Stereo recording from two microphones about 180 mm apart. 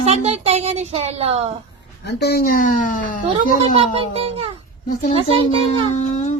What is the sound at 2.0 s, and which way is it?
Speech, 65° left (ahead or behind).